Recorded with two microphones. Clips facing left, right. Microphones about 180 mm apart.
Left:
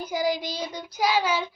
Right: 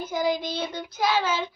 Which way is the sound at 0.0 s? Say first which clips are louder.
Right 1 dB; 10° left (ahead or behind).